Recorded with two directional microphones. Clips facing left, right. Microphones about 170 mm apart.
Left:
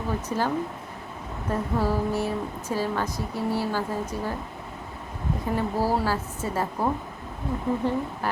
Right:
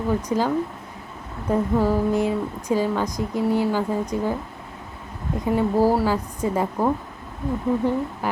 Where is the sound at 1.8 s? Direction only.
15° right (ahead or behind).